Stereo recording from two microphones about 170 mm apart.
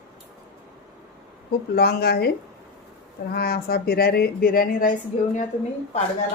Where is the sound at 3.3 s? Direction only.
65° left (ahead or behind).